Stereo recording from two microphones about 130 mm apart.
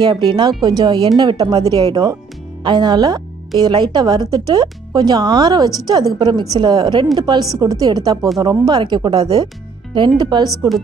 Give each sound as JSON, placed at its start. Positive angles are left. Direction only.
{"t": 0.0, "sound": "speech", "side_deg": -35}